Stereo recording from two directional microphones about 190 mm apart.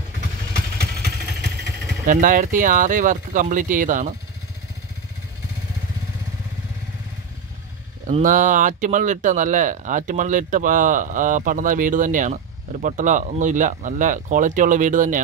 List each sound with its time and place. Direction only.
2.0 s speech: 45° right (ahead or behind)
8.1 s speech: 40° right (ahead or behind)